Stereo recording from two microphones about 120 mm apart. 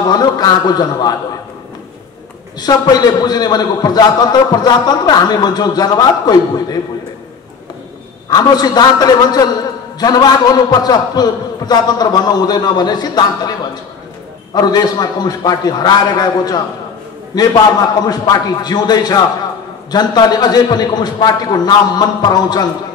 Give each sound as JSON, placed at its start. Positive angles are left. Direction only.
{"t": 0.1, "sound": "a man's voice", "side_deg": 35}
{"t": 2.6, "sound": "a man's voice", "side_deg": 35}
{"t": 8.3, "sound": "a man's voice", "side_deg": 35}